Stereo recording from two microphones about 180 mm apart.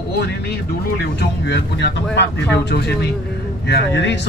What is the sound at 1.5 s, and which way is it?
Speech, 75° left (ahead or behind).